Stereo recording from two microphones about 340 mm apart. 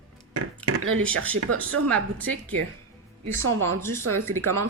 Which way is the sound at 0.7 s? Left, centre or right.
Right.